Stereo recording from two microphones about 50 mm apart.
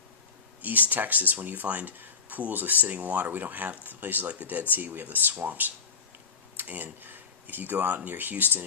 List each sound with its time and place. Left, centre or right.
0.6 s speech: right